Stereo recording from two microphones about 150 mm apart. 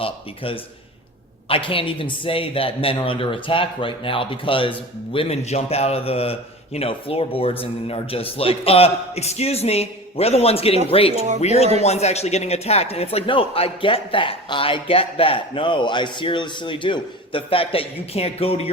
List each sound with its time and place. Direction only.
0.0 s speech: 40° left (ahead or behind)